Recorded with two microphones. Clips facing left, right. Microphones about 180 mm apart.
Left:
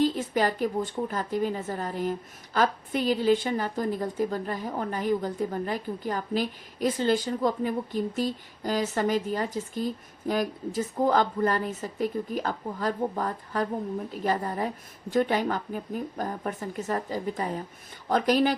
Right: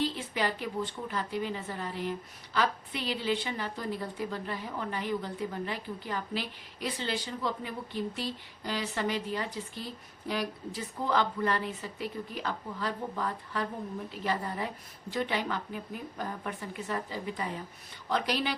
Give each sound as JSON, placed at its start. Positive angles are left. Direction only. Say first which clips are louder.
{"t": 0.0, "sound": "speech", "louder": "left 7 dB", "side_deg": 45}